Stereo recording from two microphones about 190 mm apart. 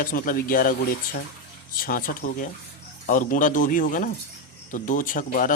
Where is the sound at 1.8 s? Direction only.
45° left (ahead or behind).